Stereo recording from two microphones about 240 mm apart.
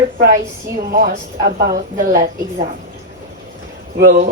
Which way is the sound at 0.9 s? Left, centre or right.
Right.